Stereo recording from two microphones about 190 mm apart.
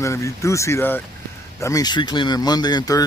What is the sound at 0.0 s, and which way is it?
Speech, 15° left (ahead or behind).